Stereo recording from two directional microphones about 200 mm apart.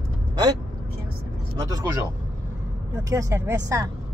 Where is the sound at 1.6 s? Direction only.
20° right (ahead or behind).